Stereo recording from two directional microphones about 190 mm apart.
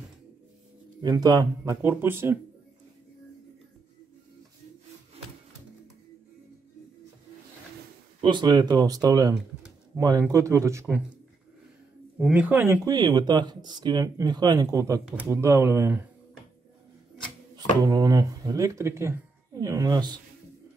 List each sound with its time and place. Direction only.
1.0 s speech: 20° right (ahead or behind)
8.2 s speech: 25° right (ahead or behind)
12.2 s speech: 5° right (ahead or behind)
17.8 s speech: 20° right (ahead or behind)